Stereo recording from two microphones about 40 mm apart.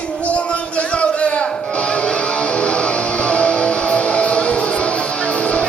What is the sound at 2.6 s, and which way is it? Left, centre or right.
Music, left.